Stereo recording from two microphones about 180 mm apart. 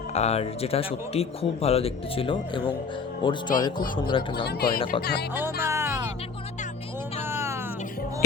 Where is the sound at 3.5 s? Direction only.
50° left (ahead or behind).